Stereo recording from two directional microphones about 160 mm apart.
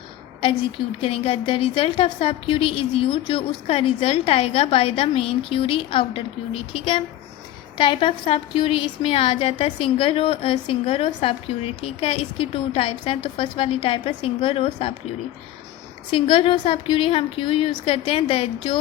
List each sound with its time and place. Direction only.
1.0 s a woman's voice: 35° left (ahead or behind)
16.1 s a woman's voice: 35° left (ahead or behind)